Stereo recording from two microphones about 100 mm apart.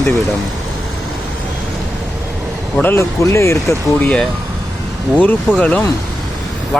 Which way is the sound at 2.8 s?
25° left (ahead or behind).